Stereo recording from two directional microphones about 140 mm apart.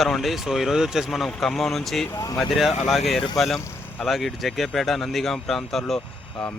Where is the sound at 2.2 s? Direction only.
25° left (ahead or behind).